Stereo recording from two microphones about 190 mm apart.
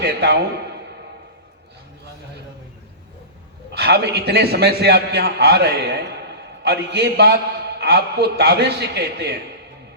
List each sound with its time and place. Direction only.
0.0 s a man's voice: 60° right (ahead or behind)
3.7 s a man's voice: 60° right (ahead or behind)